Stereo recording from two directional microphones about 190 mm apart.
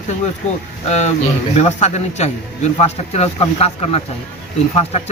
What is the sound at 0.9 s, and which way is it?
A man's voice, 35° left (ahead or behind).